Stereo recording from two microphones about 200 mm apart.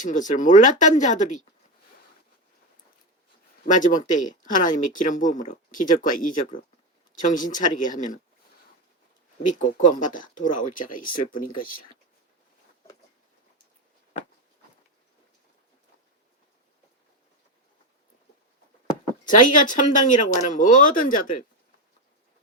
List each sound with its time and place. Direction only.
0.0 s speech: 40° left (ahead or behind)
3.8 s speech: 40° left (ahead or behind)
9.8 s speech: 40° left (ahead or behind)
19.3 s speech: 40° left (ahead or behind)